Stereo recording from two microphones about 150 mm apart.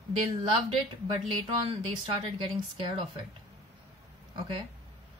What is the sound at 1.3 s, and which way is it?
Speech, 35° right (ahead or behind).